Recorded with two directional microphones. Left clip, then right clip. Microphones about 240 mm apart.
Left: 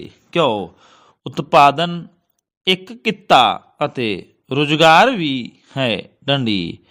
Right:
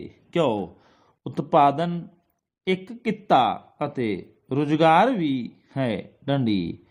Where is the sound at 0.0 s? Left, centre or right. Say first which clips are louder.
Left 6 dB; left.